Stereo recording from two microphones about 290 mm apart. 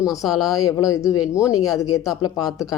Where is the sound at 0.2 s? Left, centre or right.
Centre.